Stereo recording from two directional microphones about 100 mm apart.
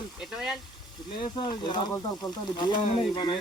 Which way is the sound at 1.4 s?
50° left (ahead or behind).